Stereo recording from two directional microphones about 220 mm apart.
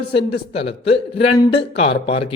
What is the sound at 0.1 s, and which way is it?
A man's voice, 25° left (ahead or behind).